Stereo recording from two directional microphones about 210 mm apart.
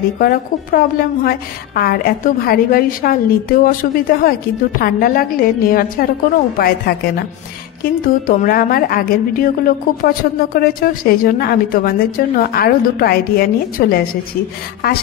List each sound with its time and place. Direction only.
0.2 s a woman's voice: 45° left (ahead or behind)